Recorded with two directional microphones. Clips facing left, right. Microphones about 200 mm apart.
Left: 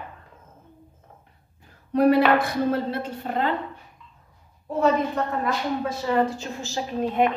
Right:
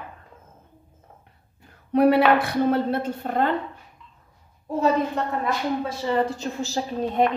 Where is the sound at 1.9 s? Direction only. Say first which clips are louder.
Right 1 dB; 65° right (ahead or behind).